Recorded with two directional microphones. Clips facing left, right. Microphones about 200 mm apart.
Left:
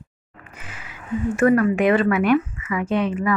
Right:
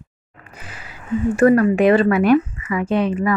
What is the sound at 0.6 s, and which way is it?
A woman's voice, 35° right (ahead or behind).